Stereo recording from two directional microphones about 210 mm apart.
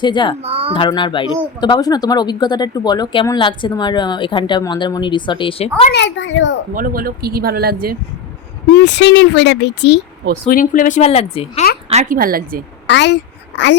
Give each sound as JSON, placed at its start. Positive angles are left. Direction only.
{"t": 0.0, "sound": "speech", "side_deg": 20}
{"t": 0.4, "sound": "speech", "side_deg": -25}
{"t": 0.7, "sound": "speech", "side_deg": 25}
{"t": 5.9, "sound": "speech", "side_deg": 60}
{"t": 6.7, "sound": "speech", "side_deg": -40}
{"t": 8.7, "sound": "speech", "side_deg": 55}
{"t": 10.4, "sound": "speech", "side_deg": 40}
{"t": 11.9, "sound": "speech", "side_deg": -35}
{"t": 12.9, "sound": "speech", "side_deg": 55}